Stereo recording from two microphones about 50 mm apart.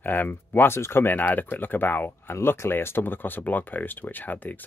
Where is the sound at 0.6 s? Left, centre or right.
Left.